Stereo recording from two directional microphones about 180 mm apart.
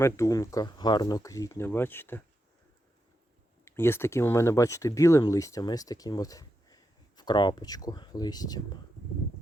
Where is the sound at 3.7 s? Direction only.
15° left (ahead or behind).